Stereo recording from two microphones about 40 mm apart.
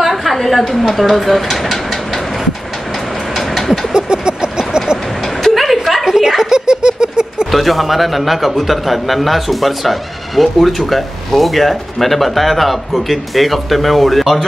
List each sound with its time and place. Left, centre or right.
0.0 s speech: centre
3.3 s vehicle: centre
3.9 s vehicle: right
5.5 s a sound: centre
6.0 s a sound: centre
7.5 s a man's voice: centre